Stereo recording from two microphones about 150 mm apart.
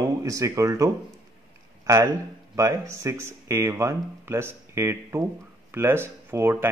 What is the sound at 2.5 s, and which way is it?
A man's voice, 20° right (ahead or behind).